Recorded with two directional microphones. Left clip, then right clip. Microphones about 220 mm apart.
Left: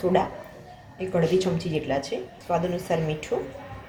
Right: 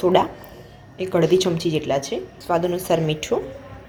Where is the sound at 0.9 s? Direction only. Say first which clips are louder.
Right 5 dB; 40° right (ahead or behind).